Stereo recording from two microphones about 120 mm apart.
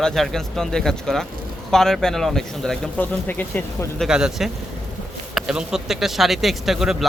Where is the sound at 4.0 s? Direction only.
5° right (ahead or behind).